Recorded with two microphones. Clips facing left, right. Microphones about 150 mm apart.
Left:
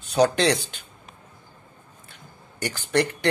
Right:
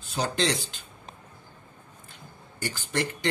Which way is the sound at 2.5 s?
70° left (ahead or behind).